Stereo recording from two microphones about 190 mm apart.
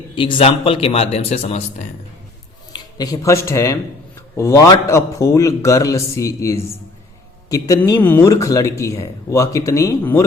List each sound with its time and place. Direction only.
0.2 s a man's voice: 30° left (ahead or behind)
2.7 s speech: 20° left (ahead or behind)